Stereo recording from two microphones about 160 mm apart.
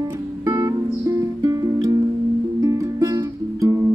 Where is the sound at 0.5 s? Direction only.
20° right (ahead or behind).